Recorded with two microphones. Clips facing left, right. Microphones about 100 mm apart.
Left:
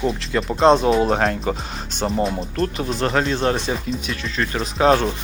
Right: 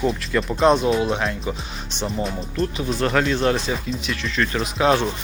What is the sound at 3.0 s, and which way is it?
Speech, 30° left (ahead or behind).